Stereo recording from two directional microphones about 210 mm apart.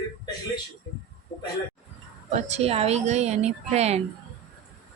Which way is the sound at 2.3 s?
30° right (ahead or behind).